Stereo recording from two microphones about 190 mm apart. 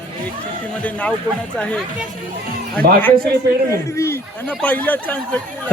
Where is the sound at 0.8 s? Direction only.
5° left (ahead or behind).